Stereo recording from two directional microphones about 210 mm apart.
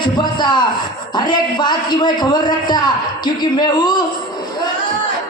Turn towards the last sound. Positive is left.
turn(degrees=20)  # may be behind; listen again after turning